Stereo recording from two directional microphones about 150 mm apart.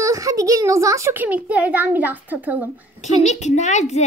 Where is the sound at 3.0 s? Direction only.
50° left (ahead or behind).